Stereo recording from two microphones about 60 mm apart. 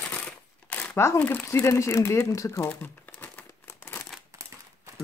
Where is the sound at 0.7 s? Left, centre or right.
Left.